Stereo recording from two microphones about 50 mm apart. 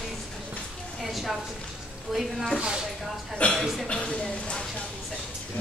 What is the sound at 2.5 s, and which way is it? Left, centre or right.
Speech, centre.